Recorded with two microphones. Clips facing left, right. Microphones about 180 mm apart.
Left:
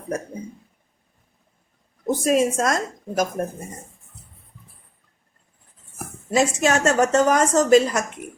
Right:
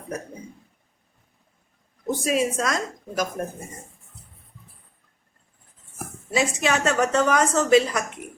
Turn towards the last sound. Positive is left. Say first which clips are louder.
# left 3 dB
turn(degrees=40)  # may be behind; listen again after turning